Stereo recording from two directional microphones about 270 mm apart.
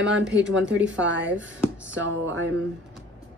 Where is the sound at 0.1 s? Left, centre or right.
Right.